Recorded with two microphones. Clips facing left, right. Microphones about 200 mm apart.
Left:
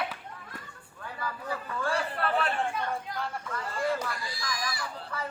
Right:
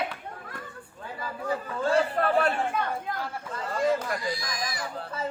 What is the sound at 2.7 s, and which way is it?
Chatter, 60° right (ahead or behind).